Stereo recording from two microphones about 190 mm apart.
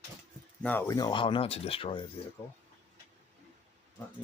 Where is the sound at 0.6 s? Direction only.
10° left (ahead or behind); by 2.0 s 25° left (ahead or behind).